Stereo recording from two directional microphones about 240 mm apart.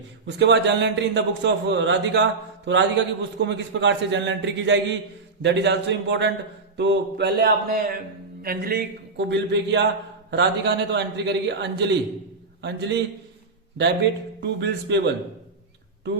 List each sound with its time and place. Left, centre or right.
0.3 s a man's voice: right
14.4 s a man's voice: right